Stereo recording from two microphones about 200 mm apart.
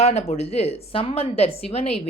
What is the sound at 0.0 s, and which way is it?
A woman's voice, 30° left (ahead or behind).